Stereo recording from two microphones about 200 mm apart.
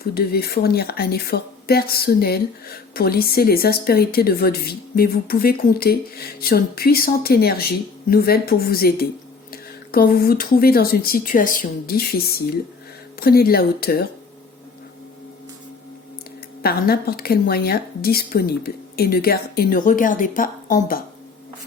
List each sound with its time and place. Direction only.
0.0 s speech: 50° left (ahead or behind)
16.6 s speech: 50° left (ahead or behind)